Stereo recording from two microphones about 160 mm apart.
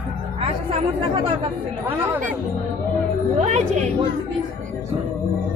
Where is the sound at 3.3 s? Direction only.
40° right (ahead or behind).